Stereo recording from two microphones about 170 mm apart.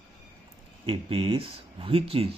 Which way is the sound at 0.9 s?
35° right (ahead or behind).